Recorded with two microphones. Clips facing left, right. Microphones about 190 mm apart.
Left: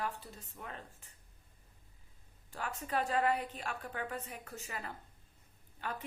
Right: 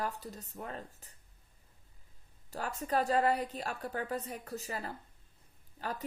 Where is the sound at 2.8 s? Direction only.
40° right (ahead or behind).